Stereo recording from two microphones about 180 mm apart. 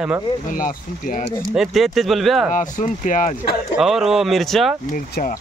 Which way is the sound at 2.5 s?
45° left (ahead or behind).